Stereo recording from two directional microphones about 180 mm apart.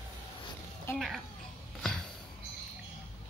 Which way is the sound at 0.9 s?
Centre (ahead or behind).